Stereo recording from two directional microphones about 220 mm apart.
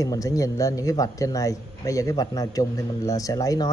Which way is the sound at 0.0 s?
15° left (ahead or behind).